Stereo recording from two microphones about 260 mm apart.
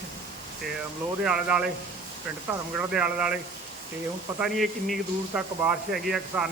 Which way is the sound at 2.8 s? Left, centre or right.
Centre.